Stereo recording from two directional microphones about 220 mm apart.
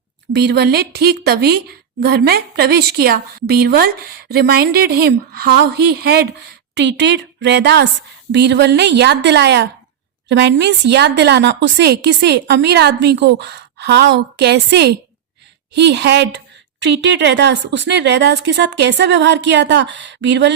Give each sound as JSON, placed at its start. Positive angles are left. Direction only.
{"t": 0.3, "sound": "a woman's voice", "side_deg": -45}